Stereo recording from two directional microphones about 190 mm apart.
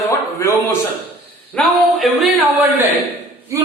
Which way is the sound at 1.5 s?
Centre (ahead or behind).